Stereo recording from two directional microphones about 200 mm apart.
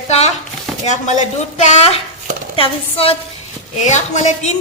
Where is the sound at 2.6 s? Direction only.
30° left (ahead or behind).